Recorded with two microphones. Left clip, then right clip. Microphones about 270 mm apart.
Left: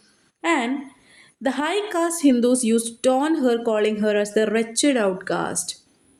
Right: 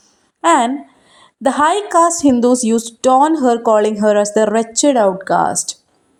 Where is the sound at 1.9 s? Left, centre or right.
Right.